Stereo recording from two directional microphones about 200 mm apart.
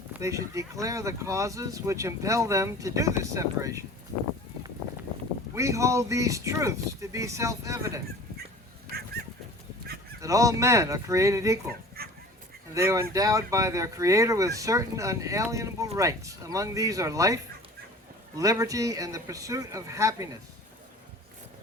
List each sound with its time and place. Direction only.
0.1 s speech: 15° right (ahead or behind)
5.5 s speech: 15° right (ahead or behind)
10.2 s speech: 15° right (ahead or behind)
12.0 s dog: 50° right (ahead or behind)
12.7 s speech: 15° right (ahead or behind)